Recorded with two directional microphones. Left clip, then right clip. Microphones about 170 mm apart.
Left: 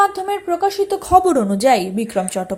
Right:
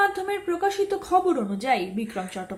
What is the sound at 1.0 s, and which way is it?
A woman's voice, 50° left (ahead or behind).